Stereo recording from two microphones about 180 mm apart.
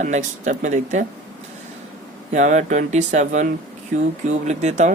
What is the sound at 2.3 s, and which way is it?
Speech, 45° right (ahead or behind).